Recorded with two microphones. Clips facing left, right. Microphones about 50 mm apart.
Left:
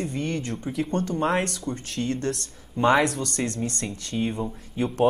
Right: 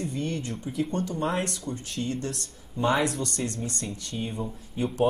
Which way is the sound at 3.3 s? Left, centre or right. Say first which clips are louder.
Left 4 dB; left.